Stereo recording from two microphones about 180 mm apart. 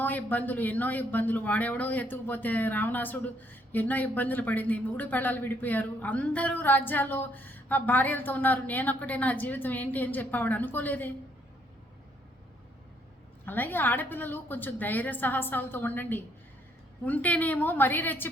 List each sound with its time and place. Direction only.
0.0 s a man's voice: 10° left (ahead or behind)
13.4 s a man's voice: 10° left (ahead or behind)